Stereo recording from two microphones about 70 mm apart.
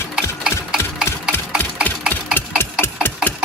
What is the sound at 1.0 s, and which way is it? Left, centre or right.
Engine, left.